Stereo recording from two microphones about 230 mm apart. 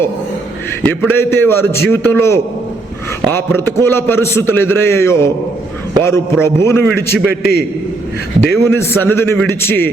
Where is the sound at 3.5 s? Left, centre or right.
Centre.